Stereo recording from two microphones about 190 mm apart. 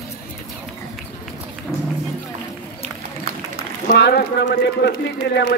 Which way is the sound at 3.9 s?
60° left (ahead or behind).